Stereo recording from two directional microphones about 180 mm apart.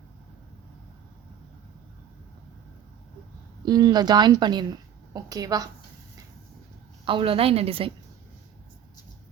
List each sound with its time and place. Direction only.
3.7 s speech: 25° right (ahead or behind)
7.0 s a woman's voice: 30° right (ahead or behind)